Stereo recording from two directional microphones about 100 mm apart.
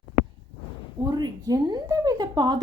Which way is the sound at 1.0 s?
45° right (ahead or behind).